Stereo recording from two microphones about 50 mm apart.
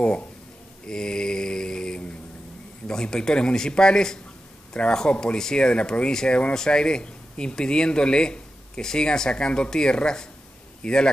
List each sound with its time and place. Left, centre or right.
0.8 s mantra: centre
2.9 s a man's voice: centre